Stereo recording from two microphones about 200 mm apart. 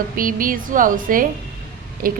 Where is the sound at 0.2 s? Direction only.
45° right (ahead or behind).